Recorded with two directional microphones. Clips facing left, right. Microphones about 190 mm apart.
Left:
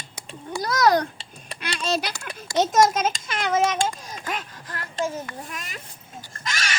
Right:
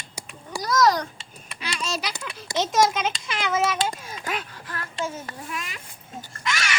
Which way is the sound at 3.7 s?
45° left (ahead or behind).